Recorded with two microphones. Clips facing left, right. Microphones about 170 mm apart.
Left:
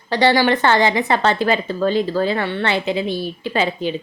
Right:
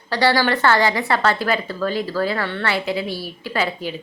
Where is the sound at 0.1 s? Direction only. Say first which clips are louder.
Left 3 dB; 20° left (ahead or behind).